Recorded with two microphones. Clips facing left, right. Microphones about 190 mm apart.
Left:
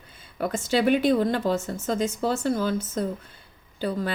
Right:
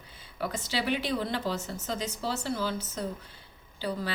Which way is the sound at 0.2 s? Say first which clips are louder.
Left 6 dB; 50° left (ahead or behind).